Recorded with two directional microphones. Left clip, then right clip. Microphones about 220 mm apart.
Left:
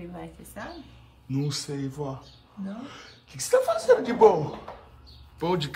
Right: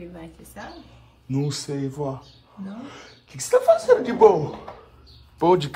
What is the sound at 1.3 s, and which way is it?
Speech, 10° left (ahead or behind).